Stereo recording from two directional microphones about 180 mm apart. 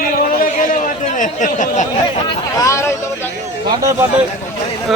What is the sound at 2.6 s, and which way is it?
Speech, 15° left (ahead or behind).